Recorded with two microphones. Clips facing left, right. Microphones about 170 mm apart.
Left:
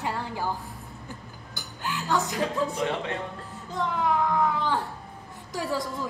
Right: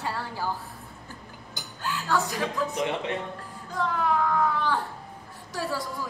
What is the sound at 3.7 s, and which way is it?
A woman's voice, 20° left (ahead or behind).